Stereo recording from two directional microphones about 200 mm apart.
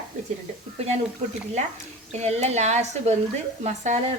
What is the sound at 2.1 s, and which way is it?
A woman's voice, 35° right (ahead or behind).